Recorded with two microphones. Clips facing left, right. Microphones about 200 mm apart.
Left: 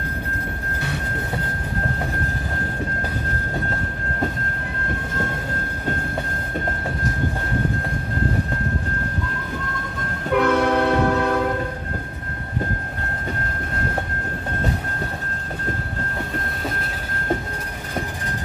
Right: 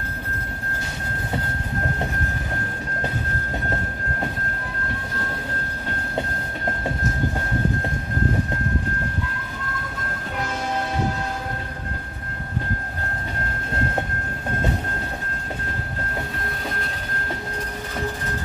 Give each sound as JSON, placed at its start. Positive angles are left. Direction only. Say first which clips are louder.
{"t": 10.3, "sound": "train", "louder": "left 11 dB", "side_deg": 65}